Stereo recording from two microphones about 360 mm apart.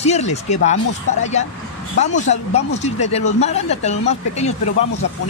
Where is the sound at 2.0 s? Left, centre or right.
Centre.